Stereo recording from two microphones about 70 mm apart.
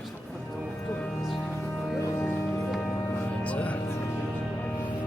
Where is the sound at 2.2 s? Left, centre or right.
Left.